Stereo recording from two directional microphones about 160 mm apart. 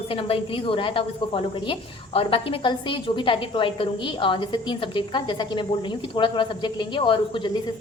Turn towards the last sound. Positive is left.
turn(degrees=30)  # may be behind; listen again after turning